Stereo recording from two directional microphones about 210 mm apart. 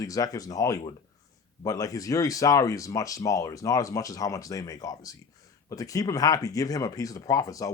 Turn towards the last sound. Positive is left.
turn(degrees=15)  # may be behind; listen again after turning